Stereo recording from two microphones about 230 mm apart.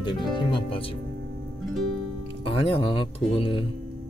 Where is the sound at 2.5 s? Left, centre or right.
Left.